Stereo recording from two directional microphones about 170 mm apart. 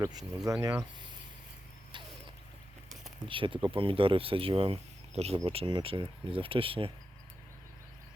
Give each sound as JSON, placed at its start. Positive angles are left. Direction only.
{"t": 0.0, "sound": "speech", "side_deg": -20}
{"t": 3.2, "sound": "speech", "side_deg": -30}